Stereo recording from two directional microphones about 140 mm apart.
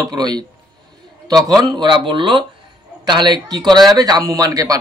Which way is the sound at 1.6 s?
30° right (ahead or behind).